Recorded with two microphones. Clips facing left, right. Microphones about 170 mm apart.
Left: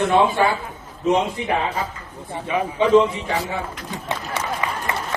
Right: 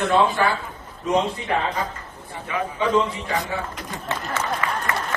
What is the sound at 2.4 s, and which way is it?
Speech, 20° left (ahead or behind).